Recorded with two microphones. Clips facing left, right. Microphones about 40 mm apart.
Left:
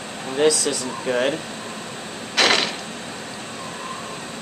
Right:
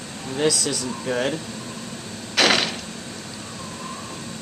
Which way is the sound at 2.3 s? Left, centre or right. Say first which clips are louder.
Even; centre.